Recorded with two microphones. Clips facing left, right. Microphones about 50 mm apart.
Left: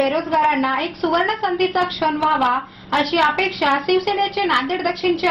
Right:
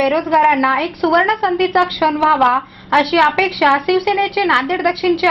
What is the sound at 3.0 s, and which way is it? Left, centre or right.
Speech, right.